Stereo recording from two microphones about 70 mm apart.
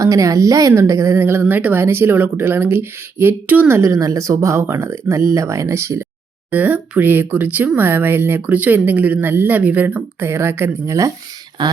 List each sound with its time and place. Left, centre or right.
0.0 s speech: right
3.8 s speech: right
6.5 s speech: right
11.6 s speech: right